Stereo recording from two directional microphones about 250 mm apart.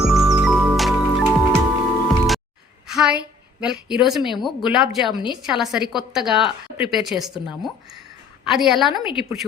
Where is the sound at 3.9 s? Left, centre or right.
Centre.